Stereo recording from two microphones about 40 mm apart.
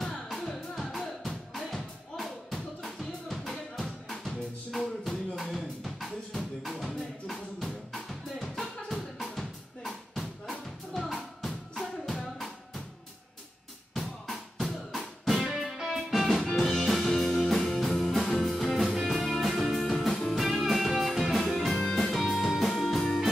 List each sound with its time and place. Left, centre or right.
0.3 s music: centre
4.6 s drum: centre
14.3 s music: centre